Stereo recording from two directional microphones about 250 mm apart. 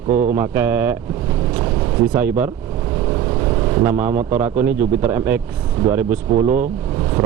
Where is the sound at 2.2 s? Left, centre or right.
Centre.